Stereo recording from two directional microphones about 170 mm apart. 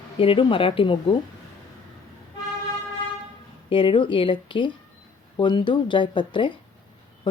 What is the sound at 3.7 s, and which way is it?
A woman's voice, 30° left (ahead or behind).